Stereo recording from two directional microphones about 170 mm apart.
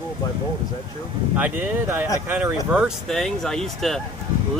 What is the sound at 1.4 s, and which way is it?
Speech, 10° right (ahead or behind).